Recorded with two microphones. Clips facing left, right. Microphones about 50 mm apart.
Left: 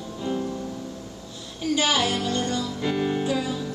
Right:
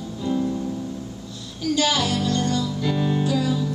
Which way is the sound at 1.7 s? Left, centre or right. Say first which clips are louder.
Right 1 dB; left.